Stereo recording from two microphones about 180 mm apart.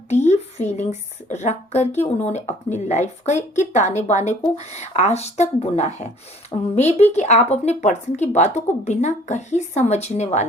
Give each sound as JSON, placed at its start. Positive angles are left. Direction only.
{"t": 0.1, "sound": "speech", "side_deg": 40}